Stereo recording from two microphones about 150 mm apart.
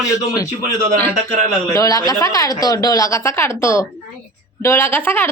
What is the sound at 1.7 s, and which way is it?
A woman's voice, 25° left (ahead or behind).